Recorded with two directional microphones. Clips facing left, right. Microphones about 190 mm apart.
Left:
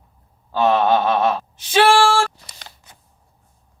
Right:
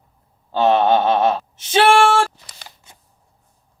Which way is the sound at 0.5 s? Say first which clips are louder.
Right 1 dB; 25° right (ahead or behind).